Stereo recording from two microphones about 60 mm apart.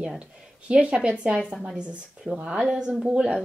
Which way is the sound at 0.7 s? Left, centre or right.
Centre.